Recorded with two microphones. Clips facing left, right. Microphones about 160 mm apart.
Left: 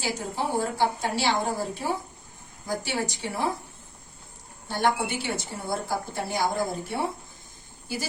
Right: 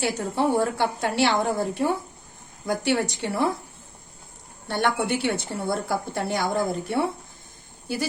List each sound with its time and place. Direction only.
0.0 s a woman's voice: 65° right (ahead or behind)
4.7 s a woman's voice: 65° right (ahead or behind)